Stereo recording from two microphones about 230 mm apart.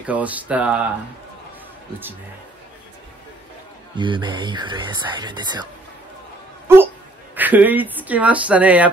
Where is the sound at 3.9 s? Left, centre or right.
Right.